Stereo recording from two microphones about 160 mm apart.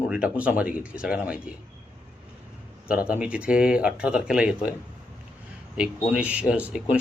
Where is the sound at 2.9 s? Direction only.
5° right (ahead or behind).